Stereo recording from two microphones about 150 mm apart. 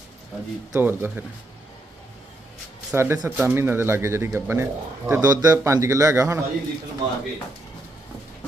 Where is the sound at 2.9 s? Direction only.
15° right (ahead or behind).